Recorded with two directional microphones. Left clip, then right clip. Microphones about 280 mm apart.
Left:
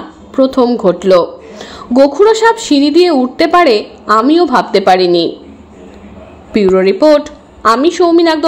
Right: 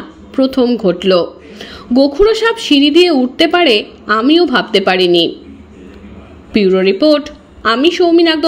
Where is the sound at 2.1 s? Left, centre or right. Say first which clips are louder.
Left 3 dB; right.